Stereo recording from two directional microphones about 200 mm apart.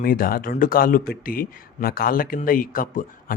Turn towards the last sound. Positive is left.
turn(degrees=45)  # may be behind; listen again after turning